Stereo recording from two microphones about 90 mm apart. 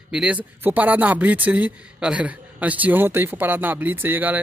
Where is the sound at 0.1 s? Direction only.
15° right (ahead or behind).